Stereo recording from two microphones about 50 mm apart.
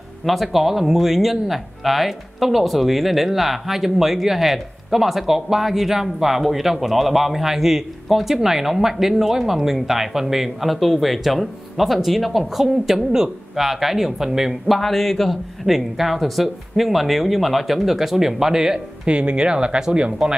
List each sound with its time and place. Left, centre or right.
0.2 s speech: centre
14.8 s speech: centre
19.0 s speech: right